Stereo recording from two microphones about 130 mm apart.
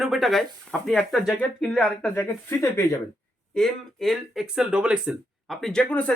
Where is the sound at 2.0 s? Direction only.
15° left (ahead or behind).